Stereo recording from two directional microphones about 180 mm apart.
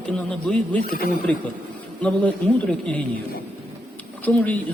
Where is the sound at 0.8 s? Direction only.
55° left (ahead or behind).